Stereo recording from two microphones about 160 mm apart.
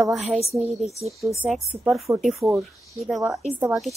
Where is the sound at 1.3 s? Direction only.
10° right (ahead or behind).